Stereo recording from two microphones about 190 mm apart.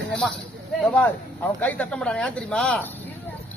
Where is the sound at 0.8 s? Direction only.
5° left (ahead or behind).